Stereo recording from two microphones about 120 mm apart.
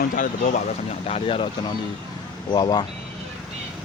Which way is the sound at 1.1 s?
55° left (ahead or behind).